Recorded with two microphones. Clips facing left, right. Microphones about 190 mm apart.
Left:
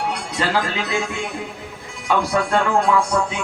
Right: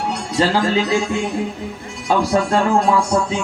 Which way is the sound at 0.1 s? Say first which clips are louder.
Right 4 dB; 30° right (ahead or behind).